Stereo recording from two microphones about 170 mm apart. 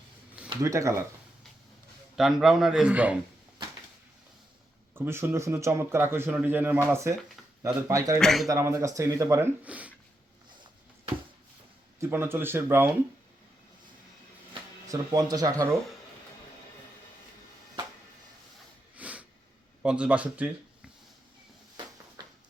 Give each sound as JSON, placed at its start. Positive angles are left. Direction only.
{"t": 0.6, "sound": "speech", "side_deg": -20}
{"t": 2.1, "sound": "a man's voice", "side_deg": 0}
{"t": 4.9, "sound": "speech", "side_deg": -15}
{"t": 8.2, "sound": "a man's voice", "side_deg": 0}
{"t": 8.4, "sound": "speech", "side_deg": -15}
{"t": 11.9, "sound": "speech", "side_deg": -15}
{"t": 14.8, "sound": "speech", "side_deg": -20}
{"t": 18.9, "sound": "snort", "side_deg": -10}
{"t": 19.8, "sound": "speech", "side_deg": -5}
{"t": 22.2, "sound": "a sound", "side_deg": -25}